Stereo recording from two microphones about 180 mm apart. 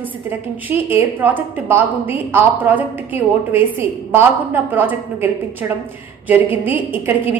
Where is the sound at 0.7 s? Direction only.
10° right (ahead or behind).